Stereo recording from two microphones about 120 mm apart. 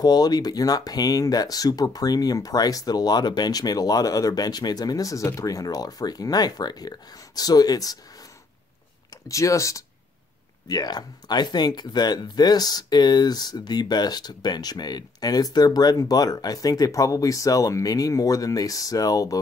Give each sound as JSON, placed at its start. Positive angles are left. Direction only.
{"t": 0.0, "sound": "speech", "side_deg": 35}
{"t": 9.3, "sound": "speech", "side_deg": 25}